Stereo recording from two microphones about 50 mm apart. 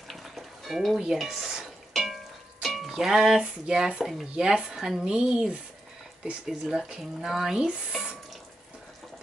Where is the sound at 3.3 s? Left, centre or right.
Centre.